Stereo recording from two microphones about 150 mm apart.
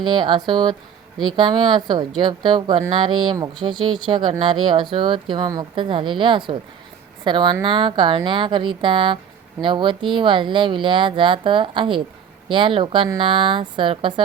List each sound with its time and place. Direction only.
0.0 s speech: 30° right (ahead or behind)